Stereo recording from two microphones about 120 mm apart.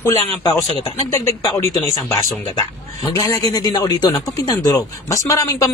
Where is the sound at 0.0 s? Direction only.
30° left (ahead or behind).